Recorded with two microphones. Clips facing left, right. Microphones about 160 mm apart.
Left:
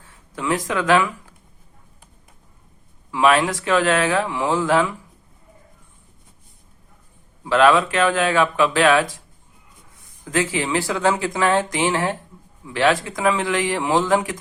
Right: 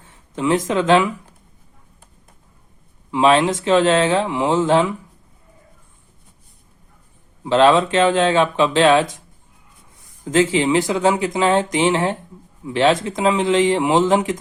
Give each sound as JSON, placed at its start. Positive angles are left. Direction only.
{"t": 0.3, "sound": "speech", "side_deg": -20}
{"t": 3.1, "sound": "speech", "side_deg": -25}
{"t": 7.4, "sound": "speech", "side_deg": -25}
{"t": 10.2, "sound": "speech", "side_deg": -25}